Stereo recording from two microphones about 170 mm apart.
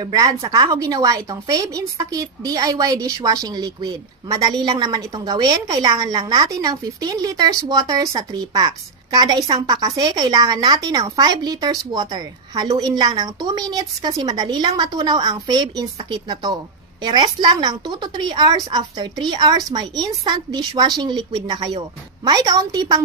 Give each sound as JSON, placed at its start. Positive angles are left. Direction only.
{"t": 0.0, "sound": "speech", "side_deg": -20}